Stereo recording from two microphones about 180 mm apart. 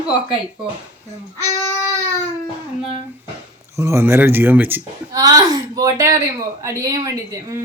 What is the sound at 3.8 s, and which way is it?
Speech, 15° right (ahead or behind).